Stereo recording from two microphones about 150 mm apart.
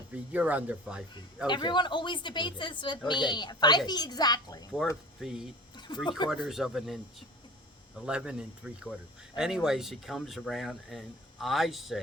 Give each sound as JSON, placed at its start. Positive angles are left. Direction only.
{"t": 0.3, "sound": "speech", "side_deg": -10}
{"t": 1.5, "sound": "a woman's voice", "side_deg": 30}
{"t": 5.2, "sound": "speech", "side_deg": -5}
{"t": 6.1, "sound": "a woman's voice", "side_deg": 30}
{"t": 6.3, "sound": "speech", "side_deg": 0}
{"t": 8.0, "sound": "speech", "side_deg": -5}